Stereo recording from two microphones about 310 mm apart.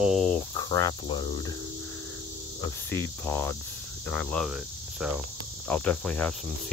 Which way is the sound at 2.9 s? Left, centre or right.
Centre.